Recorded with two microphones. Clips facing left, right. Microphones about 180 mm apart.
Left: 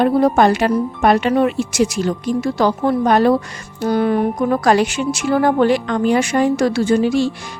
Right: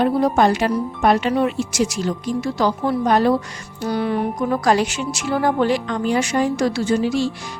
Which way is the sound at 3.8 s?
50° left (ahead or behind).